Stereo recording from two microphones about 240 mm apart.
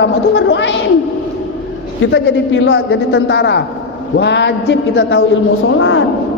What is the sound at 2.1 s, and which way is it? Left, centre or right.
A woman's voice, left.